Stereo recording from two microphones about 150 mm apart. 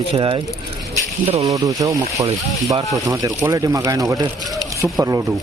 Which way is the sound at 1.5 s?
25° right (ahead or behind).